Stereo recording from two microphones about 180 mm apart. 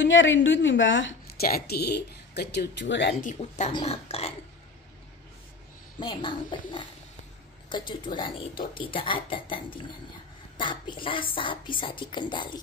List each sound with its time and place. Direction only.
0.0 s a woman's voice: 90° left
3.2 s speech: 40° left (ahead or behind)
5.9 s speech: 25° left (ahead or behind)